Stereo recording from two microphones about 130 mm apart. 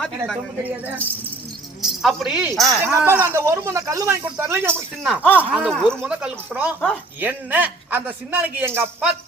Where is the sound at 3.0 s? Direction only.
15° right (ahead or behind).